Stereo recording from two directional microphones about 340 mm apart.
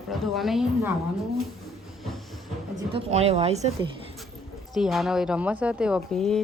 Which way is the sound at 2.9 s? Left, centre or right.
Centre.